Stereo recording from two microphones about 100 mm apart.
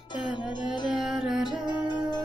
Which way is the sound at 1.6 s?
45° left (ahead or behind).